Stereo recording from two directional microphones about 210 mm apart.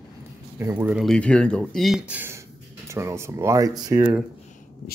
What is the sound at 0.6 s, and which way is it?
Speech, 10° right (ahead or behind).